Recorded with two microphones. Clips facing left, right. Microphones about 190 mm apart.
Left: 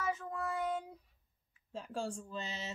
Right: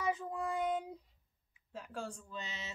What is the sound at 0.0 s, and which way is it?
Child singing, 15° right (ahead or behind).